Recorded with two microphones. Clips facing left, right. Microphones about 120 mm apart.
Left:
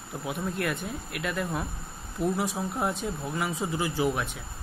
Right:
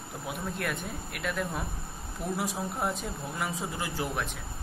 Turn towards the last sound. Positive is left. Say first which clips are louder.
# left 5 dB
turn(degrees=0)  # may be behind; listen again after turning